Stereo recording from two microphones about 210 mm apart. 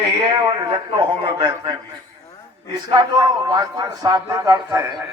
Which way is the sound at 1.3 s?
20° right (ahead or behind).